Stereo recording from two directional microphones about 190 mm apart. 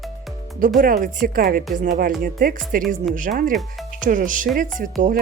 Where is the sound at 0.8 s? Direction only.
45° right (ahead or behind).